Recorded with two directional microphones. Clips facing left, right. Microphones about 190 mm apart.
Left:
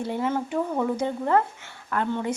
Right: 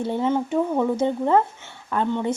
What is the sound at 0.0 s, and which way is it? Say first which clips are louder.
A woman's voice: right 4 dB; 25° right (ahead or behind).